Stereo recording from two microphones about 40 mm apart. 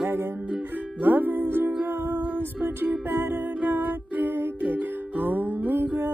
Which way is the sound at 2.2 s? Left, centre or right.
Right.